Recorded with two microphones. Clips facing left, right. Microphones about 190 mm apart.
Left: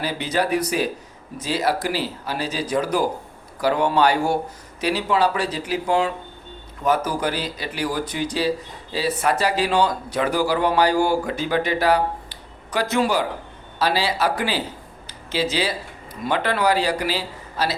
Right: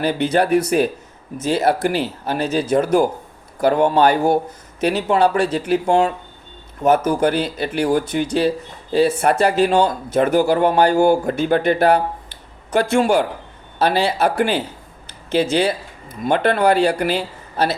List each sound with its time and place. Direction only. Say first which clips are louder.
0.0 s speech: right 6 dB; 60° right (ahead or behind)
10.9 s speech: right 6 dB; 25° right (ahead or behind)
11.3 s speech: right 6 dB; 55° right (ahead or behind)